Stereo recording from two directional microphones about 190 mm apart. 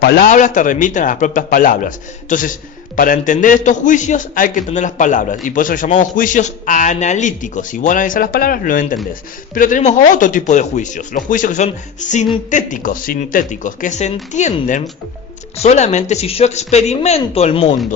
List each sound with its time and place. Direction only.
0.0 s a man's voice: 45° left (ahead or behind)